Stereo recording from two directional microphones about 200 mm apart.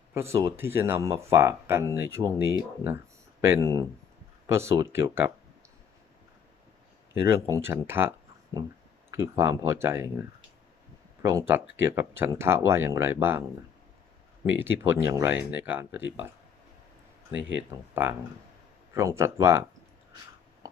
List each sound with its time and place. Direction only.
0.1 s speech: 15° right (ahead or behind)
7.1 s speech: 15° right (ahead or behind)
11.2 s speech: 15° right (ahead or behind)
14.6 s speech: 10° right (ahead or behind)
18.0 s speech: 10° right (ahead or behind)